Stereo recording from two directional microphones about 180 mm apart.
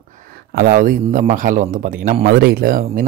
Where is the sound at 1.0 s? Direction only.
45° right (ahead or behind).